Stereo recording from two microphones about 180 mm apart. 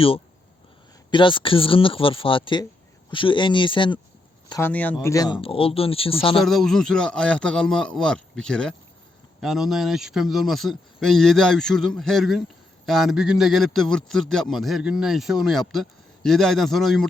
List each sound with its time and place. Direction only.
1.1 s speech: 25° left (ahead or behind)
4.7 s speech: 10° left (ahead or behind)
5.0 s speech: 20° left (ahead or behind)
6.4 s a man's voice: centre (ahead or behind)